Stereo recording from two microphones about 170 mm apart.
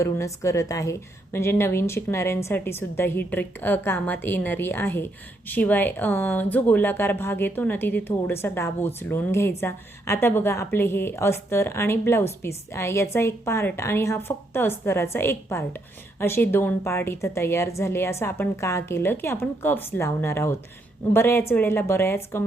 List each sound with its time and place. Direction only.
0.0 s speech: 15° left (ahead or behind)